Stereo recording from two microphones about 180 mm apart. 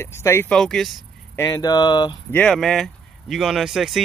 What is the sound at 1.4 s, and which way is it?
Speech, 20° left (ahead or behind).